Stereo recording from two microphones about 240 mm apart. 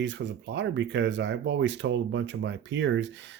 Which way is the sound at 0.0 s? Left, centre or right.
Right.